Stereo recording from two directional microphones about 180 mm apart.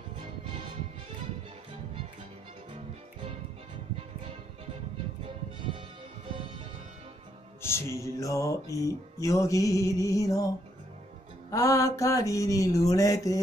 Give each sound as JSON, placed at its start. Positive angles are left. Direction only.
{"t": 7.6, "sound": "music", "side_deg": 15}
{"t": 11.5, "sound": "music", "side_deg": 15}